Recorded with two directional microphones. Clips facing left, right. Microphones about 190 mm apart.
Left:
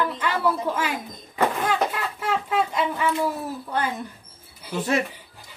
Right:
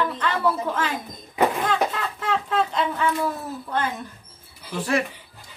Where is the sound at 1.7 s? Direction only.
10° left (ahead or behind).